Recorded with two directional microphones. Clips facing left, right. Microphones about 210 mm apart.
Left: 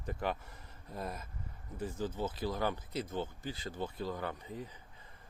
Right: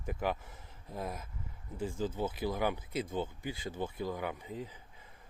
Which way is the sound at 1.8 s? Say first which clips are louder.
Right 2 dB; 10° right (ahead or behind).